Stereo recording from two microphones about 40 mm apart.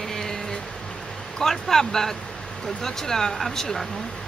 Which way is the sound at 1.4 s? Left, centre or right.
Centre.